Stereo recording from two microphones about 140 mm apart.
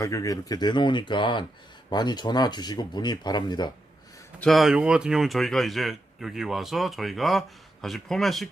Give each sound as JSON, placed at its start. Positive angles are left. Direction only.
{"t": 0.0, "sound": "speech", "side_deg": 25}
{"t": 4.4, "sound": "speech", "side_deg": 0}